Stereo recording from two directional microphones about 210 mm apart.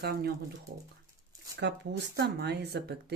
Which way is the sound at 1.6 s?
55° right (ahead or behind).